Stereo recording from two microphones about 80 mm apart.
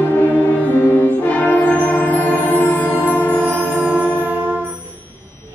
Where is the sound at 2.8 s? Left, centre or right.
Right.